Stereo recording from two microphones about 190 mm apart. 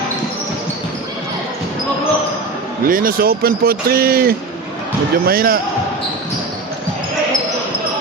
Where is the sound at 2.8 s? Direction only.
50° right (ahead or behind).